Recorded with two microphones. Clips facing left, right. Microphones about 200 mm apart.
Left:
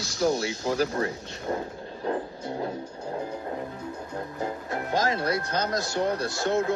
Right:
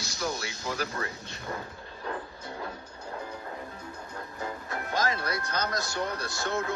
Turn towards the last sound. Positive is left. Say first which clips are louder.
# left 7 dB
turn(degrees=45)  # may be behind; listen again after turning